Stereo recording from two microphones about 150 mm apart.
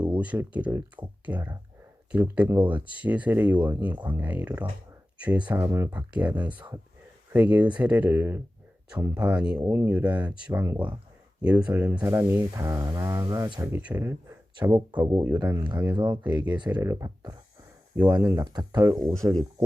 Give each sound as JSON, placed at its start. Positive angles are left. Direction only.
{"t": 0.0, "sound": "speech", "side_deg": -10}
{"t": 15.4, "sound": "speech", "side_deg": -25}